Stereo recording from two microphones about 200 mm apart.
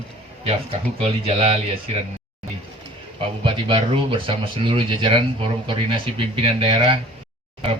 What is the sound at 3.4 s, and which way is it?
Speech, 25° right (ahead or behind).